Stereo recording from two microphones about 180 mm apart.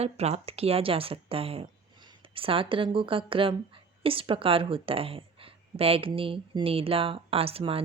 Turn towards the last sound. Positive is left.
turn(degrees=-30)  # may be behind; listen again after turning